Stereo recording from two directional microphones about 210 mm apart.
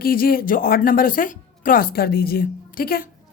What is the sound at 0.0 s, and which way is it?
A woman's voice, 45° left (ahead or behind).